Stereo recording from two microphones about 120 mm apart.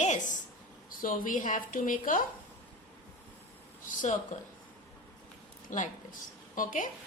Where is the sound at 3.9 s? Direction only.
90° left.